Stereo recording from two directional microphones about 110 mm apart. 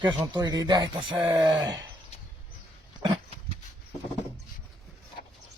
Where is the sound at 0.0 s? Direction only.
35° right (ahead or behind).